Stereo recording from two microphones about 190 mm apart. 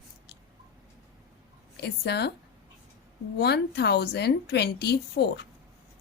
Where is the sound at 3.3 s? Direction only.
60° left (ahead or behind).